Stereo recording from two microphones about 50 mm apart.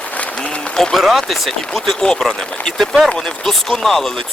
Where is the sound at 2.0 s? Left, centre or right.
Centre.